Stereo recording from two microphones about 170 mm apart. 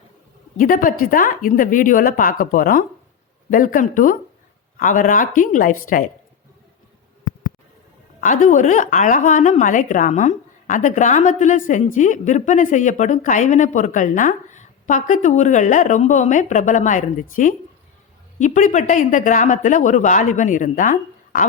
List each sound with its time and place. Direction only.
0.6 s a woman's voice: 50° left (ahead or behind)
8.2 s a woman's voice: 50° left (ahead or behind)